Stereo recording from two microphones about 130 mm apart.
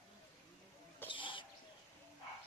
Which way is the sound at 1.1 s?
40° left (ahead or behind).